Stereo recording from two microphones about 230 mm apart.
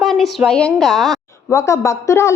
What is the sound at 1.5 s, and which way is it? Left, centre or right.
Speech, centre.